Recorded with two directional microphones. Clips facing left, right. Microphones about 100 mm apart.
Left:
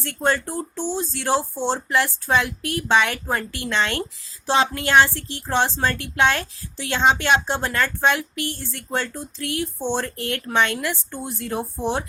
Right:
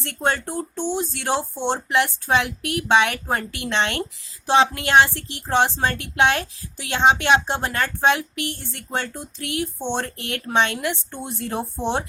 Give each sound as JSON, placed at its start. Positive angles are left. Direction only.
{"t": 0.2, "sound": "speech", "side_deg": -20}